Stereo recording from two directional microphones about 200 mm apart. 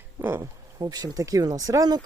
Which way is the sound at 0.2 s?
10° right (ahead or behind).